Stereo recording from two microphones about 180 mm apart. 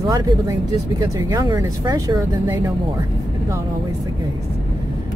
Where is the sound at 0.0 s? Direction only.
20° right (ahead or behind).